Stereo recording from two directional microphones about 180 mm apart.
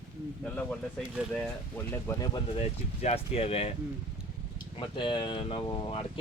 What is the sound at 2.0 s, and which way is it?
Speech, 20° left (ahead or behind).